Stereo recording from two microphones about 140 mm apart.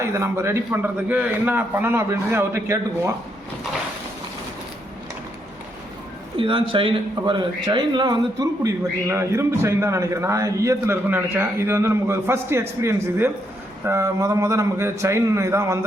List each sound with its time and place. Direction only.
0.0 s a man's voice: 20° right (ahead or behind)
6.3 s a man's voice: 40° right (ahead or behind); by 15.8 s 20° right (ahead or behind)